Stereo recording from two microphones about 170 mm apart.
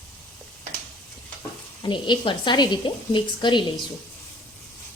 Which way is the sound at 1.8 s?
30° left (ahead or behind).